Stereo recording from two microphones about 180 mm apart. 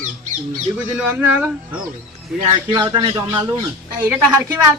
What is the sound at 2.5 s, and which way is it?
Speech, 25° right (ahead or behind).